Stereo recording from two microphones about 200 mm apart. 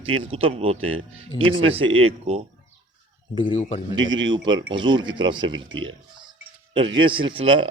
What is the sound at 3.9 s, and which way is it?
A man's voice, 20° right (ahead or behind).